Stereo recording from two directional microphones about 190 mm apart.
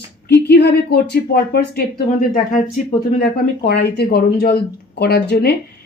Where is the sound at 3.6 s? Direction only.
60° left (ahead or behind).